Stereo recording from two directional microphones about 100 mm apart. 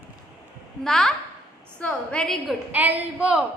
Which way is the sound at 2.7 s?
15° right (ahead or behind).